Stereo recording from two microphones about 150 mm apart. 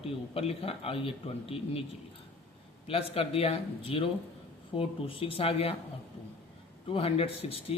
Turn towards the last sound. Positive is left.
turn(degrees=40)  # may be behind; listen again after turning